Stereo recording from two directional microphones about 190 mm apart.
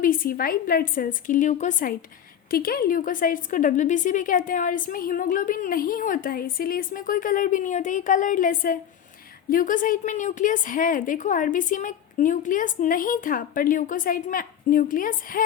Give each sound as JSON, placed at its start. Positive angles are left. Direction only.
{"t": 0.0, "sound": "a woman's voice", "side_deg": 45}